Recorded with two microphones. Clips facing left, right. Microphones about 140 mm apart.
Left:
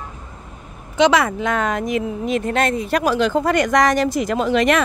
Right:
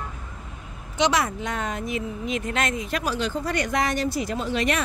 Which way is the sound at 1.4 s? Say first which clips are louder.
Left 8 dB; 90° left.